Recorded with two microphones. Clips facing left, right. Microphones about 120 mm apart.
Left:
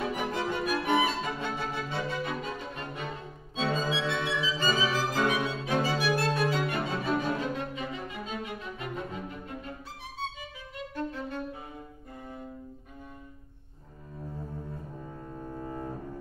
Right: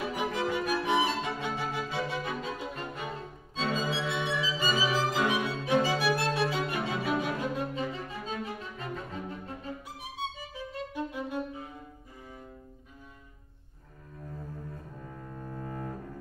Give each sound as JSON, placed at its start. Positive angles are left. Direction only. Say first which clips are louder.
{"t": 0.0, "sound": "music", "louder": "even", "side_deg": -5}
{"t": 3.6, "sound": "violin", "louder": "left 2 dB", "side_deg": 0}
{"t": 8.6, "sound": "music", "louder": "left 2 dB", "side_deg": 0}
{"t": 11.0, "sound": "violin", "louder": "even", "side_deg": -10}
{"t": 15.0, "sound": "double bass", "louder": "left 2 dB", "side_deg": 20}